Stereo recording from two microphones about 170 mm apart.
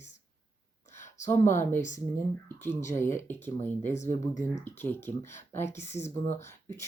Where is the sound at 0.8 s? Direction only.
45° left (ahead or behind).